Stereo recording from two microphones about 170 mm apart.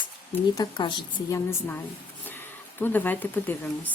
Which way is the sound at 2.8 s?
10° left (ahead or behind).